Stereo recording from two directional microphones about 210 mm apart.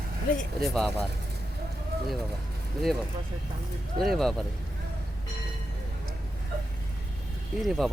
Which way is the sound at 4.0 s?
Centre (ahead or behind).